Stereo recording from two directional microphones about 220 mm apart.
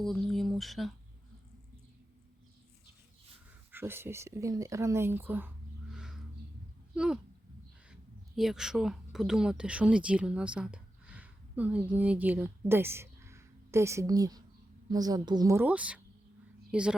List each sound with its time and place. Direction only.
0.0 s speech: centre (ahead or behind)
3.7 s speech: 10° right (ahead or behind)
5.9 s a sound: 5° right (ahead or behind)
6.9 s speech: 5° right (ahead or behind)
8.4 s speech: centre (ahead or behind)